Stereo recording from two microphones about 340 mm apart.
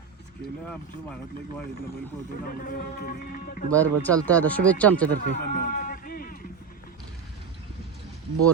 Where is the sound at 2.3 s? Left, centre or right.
Left.